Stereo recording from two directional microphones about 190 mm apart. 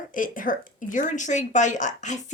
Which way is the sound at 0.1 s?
45° left (ahead or behind).